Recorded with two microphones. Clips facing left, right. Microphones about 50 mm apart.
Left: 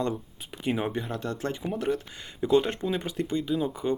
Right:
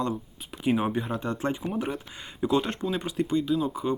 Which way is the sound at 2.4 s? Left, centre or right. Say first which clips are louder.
Left 2 dB; centre.